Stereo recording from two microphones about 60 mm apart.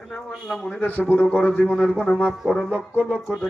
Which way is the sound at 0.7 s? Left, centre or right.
Left.